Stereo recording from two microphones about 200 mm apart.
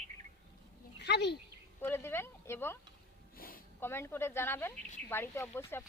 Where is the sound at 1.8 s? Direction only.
10° left (ahead or behind).